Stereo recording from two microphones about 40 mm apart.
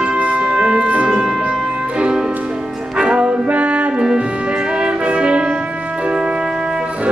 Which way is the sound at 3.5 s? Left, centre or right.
Right.